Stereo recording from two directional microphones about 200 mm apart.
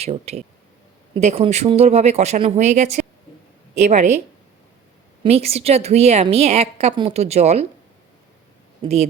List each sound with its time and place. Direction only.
0.0 s a woman's voice: 30° right (ahead or behind)
5.2 s a woman's voice: 30° right (ahead or behind)
8.8 s speech: 30° right (ahead or behind)